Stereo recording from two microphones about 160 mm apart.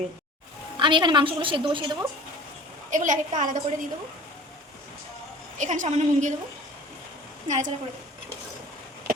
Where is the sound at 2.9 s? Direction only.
50° right (ahead or behind).